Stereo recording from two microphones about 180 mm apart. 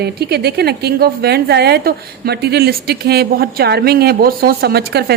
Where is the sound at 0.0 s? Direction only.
60° right (ahead or behind).